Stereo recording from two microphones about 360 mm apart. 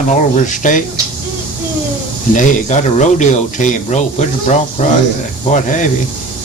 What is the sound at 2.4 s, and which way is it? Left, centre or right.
Speech, centre.